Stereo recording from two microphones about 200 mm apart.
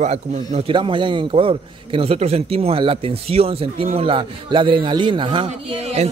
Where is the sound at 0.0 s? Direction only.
35° right (ahead or behind).